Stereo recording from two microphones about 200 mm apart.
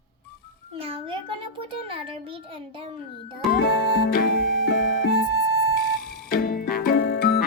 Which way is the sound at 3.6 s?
60° left (ahead or behind).